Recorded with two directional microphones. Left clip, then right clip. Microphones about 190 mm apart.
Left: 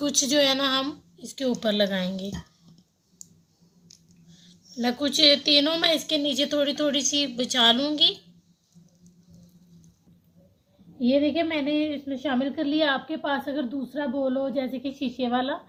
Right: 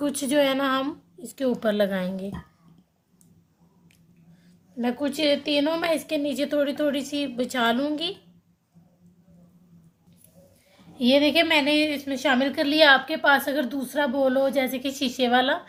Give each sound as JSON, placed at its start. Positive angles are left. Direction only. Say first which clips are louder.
{"t": 0.0, "sound": "a woman's voice", "louder": "left 1 dB", "side_deg": -25}
{"t": 4.8, "sound": "a woman's voice", "louder": "left 4 dB", "side_deg": -5}
{"t": 11.0, "sound": "a woman's voice", "louder": "right 4 dB", "side_deg": -20}